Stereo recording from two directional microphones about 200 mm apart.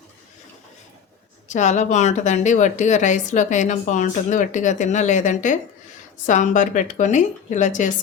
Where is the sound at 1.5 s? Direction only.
35° left (ahead or behind).